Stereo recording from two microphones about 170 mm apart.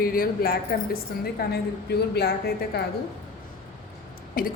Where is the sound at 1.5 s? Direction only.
75° left (ahead or behind).